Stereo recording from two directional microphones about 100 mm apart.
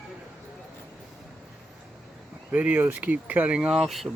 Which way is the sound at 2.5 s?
15° right (ahead or behind).